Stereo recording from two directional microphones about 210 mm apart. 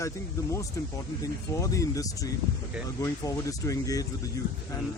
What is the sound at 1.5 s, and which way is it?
Speech, 15° left (ahead or behind).